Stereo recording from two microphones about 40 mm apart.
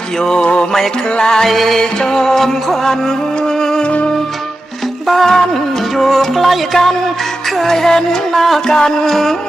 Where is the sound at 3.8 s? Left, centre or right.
Left.